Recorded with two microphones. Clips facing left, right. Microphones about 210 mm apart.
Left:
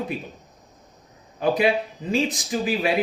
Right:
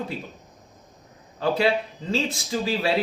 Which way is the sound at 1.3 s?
15° left (ahead or behind).